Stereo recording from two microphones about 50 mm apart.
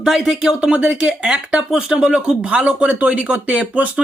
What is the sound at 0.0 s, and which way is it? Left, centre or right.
Speech, centre.